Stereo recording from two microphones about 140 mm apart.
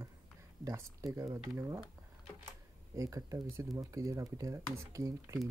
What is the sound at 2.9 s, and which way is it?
Speech, 25° right (ahead or behind).